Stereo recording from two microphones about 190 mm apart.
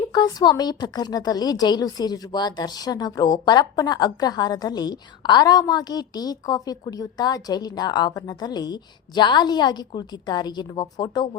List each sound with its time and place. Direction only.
0.1 s a woman's voice: 20° left (ahead or behind)